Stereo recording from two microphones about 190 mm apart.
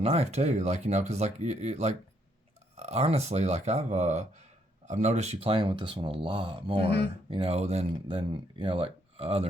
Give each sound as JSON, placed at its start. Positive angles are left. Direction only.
{"t": 0.0, "sound": "speech", "side_deg": -35}